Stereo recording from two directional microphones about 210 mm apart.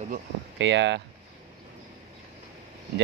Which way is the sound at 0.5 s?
60° right (ahead or behind).